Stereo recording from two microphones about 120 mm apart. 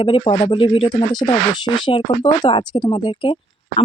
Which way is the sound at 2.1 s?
60° left (ahead or behind).